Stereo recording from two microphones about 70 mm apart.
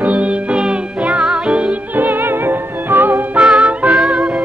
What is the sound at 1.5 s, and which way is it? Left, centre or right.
Music, centre.